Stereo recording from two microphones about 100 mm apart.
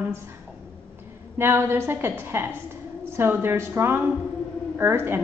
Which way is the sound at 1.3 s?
25° right (ahead or behind).